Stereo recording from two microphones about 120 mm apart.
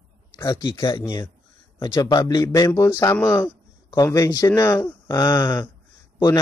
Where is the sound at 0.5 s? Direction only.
35° left (ahead or behind).